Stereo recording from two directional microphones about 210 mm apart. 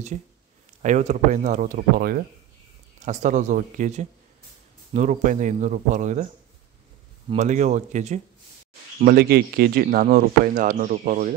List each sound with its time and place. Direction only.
0.8 s speech: 35° right (ahead or behind)
7.2 s speech: 35° right (ahead or behind)
9.0 s speech: 45° right (ahead or behind)